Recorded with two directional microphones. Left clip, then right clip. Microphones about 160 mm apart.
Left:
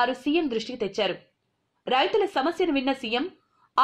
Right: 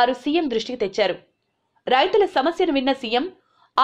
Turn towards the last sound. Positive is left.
turn(degrees=-25)  # may be behind; listen again after turning